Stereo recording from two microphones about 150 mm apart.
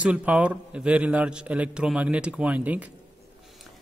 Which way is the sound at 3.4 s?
Centre (ahead or behind).